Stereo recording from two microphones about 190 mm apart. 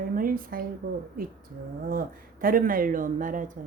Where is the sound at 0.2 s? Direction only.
45° right (ahead or behind).